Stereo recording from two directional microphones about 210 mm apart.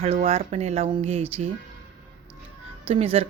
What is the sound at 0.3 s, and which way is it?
A woman's voice, 30° right (ahead or behind).